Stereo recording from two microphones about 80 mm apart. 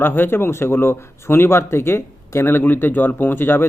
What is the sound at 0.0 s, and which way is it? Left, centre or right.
A man's voice, left.